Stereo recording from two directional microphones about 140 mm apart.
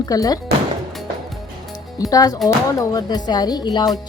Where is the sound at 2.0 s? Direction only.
25° left (ahead or behind).